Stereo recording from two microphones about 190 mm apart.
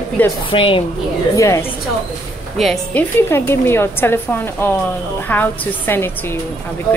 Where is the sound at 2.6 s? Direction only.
Centre (ahead or behind).